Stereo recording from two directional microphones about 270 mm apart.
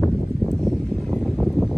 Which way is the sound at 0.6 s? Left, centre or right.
Centre.